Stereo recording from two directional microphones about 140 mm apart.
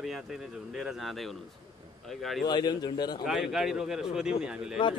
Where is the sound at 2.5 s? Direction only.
30° left (ahead or behind).